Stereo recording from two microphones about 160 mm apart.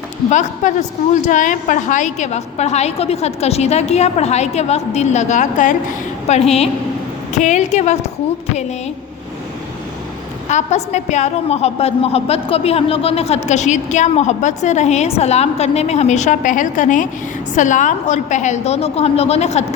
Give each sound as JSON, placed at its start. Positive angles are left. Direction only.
{"t": 0.3, "sound": "a woman's voice", "side_deg": 50}
{"t": 10.5, "sound": "a woman's voice", "side_deg": 45}